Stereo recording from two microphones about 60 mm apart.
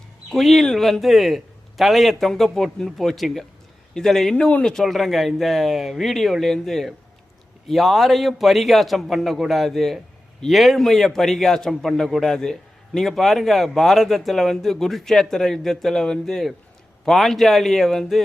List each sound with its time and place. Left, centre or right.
0.3 s a man's voice: centre
4.4 s a man's voice: left
4.6 s a man's voice: centre